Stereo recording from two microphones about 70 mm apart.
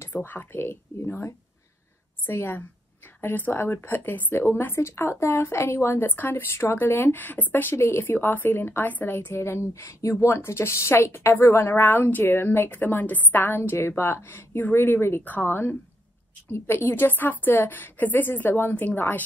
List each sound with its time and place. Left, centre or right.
0.1 s a woman's voice: left